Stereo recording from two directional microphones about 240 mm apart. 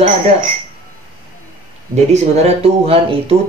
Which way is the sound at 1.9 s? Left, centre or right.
Right.